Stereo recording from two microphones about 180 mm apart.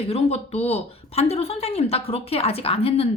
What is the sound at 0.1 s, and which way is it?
Speech, 35° left (ahead or behind).